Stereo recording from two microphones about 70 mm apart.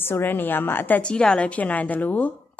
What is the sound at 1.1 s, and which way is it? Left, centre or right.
A woman's voice, centre.